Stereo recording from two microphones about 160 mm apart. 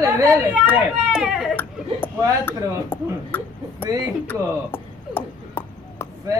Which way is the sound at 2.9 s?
15° left (ahead or behind).